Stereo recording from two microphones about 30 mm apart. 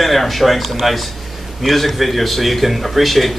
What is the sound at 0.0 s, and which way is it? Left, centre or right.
Speech, centre.